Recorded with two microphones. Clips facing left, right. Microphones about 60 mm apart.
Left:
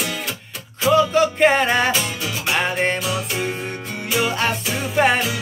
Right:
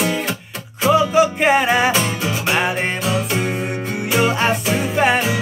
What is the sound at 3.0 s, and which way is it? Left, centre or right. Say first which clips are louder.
Music: right 4 dB; right.